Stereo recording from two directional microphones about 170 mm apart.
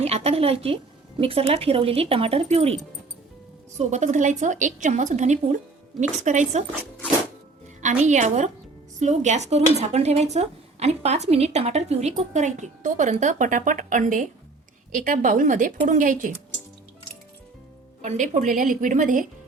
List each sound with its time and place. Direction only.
0.0 s a woman's voice: 35° right (ahead or behind)
7.8 s a woman's voice: 45° right (ahead or behind)
18.0 s a woman's voice: 45° right (ahead or behind)